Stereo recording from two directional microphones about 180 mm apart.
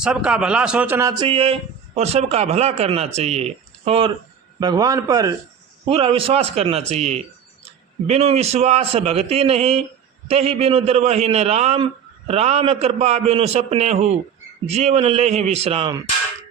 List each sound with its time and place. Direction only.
0.0 s a man's voice: 5° right (ahead or behind)
1.2 s a man's voice: 30° right (ahead or behind)
4.6 s a man's voice: 20° right (ahead or behind)
5.8 s a man's voice: 30° right (ahead or behind)